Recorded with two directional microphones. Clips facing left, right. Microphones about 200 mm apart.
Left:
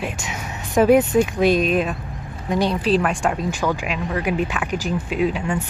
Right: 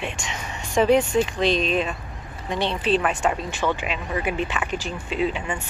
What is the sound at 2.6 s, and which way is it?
Speech, 40° left (ahead or behind).